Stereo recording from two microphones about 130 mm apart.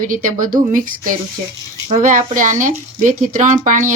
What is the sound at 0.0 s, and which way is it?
Speech, 90° right.